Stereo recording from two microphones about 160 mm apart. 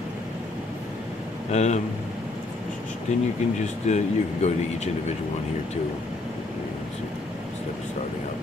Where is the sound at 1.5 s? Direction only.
45° left (ahead or behind).